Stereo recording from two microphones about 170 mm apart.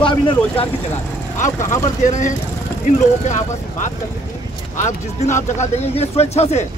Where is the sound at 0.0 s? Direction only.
30° left (ahead or behind).